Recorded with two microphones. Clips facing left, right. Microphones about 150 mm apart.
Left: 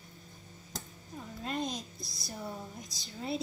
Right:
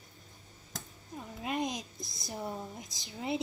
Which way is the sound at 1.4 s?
15° right (ahead or behind).